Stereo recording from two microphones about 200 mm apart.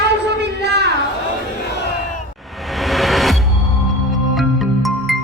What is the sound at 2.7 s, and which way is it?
Music, centre (ahead or behind).